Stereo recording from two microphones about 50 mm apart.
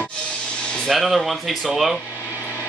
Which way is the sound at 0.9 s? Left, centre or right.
Centre.